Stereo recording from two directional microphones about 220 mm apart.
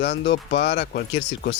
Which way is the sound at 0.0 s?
55° left (ahead or behind).